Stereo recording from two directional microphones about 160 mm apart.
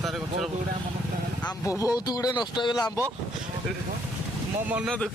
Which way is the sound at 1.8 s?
20° left (ahead or behind).